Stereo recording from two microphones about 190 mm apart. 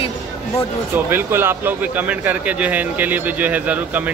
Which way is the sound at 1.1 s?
10° right (ahead or behind).